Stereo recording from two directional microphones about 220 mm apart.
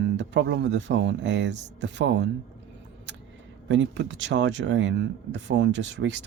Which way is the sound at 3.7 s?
55° right (ahead or behind).